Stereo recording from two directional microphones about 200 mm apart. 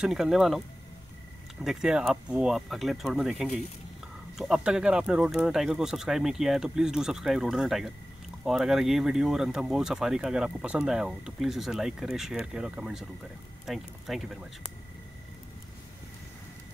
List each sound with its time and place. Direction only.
0.0 s speech: centre (ahead or behind)
1.6 s speech: 5° right (ahead or behind)